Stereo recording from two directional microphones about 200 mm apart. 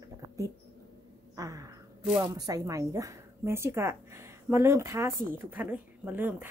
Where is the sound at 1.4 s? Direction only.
15° right (ahead or behind).